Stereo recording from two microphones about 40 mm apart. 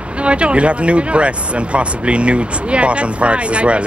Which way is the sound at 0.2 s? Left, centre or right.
Right.